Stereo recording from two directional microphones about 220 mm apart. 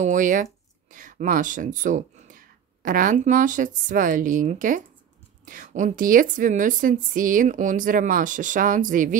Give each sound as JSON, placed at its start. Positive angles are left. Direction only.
{"t": 0.0, "sound": "a woman's voice", "side_deg": -35}